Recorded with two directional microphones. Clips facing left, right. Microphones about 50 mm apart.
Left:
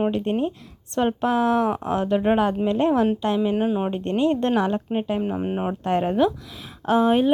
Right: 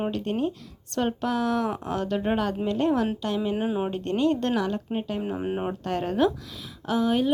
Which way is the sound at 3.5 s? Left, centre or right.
Centre.